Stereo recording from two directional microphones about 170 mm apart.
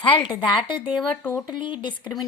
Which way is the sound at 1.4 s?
25° left (ahead or behind).